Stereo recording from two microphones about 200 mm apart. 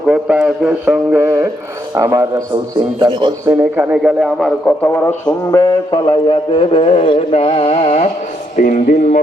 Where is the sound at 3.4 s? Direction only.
10° right (ahead or behind).